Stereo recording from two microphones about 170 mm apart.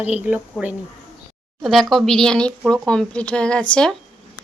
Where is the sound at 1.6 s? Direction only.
Centre (ahead or behind).